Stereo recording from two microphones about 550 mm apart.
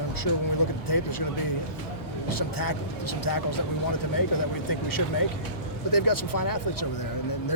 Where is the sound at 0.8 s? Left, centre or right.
Left.